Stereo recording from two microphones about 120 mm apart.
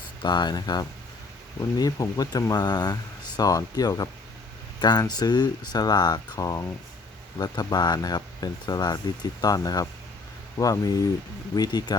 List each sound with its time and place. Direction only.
0.2 s speech: 40° left (ahead or behind)